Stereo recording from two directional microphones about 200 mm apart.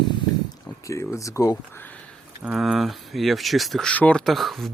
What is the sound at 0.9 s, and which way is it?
Speech, 15° left (ahead or behind).